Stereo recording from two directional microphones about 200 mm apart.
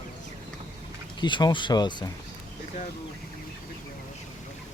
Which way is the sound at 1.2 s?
20° left (ahead or behind).